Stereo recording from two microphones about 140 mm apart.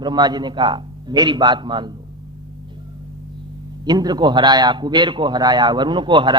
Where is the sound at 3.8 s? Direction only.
30° right (ahead or behind).